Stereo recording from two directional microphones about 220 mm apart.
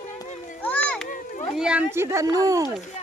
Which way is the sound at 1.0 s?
35° left (ahead or behind).